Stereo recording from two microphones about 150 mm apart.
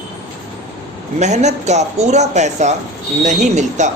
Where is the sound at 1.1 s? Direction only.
50° right (ahead or behind).